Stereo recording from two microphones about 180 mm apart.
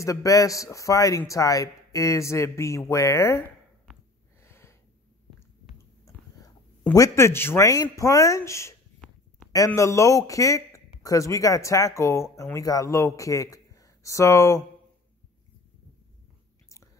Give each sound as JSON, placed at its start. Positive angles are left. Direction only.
{"t": 0.0, "sound": "speech", "side_deg": 20}
{"t": 4.4, "sound": "snort", "side_deg": 15}
{"t": 6.0, "sound": "speech", "side_deg": 20}
{"t": 9.0, "sound": "a sound", "side_deg": 5}
{"t": 9.5, "sound": "speech", "side_deg": 15}
{"t": 16.6, "sound": "chewing", "side_deg": 15}